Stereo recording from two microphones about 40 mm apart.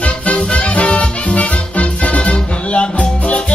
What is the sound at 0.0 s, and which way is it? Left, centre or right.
Music, left.